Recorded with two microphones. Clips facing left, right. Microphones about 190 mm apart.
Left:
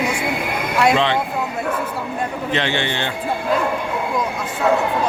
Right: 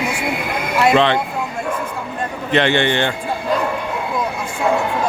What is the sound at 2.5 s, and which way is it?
Speech, 60° right (ahead or behind).